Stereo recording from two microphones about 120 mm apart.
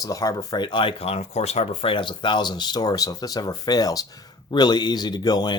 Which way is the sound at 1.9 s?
45° left (ahead or behind).